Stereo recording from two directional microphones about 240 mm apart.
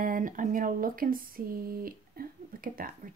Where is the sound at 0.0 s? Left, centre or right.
Right.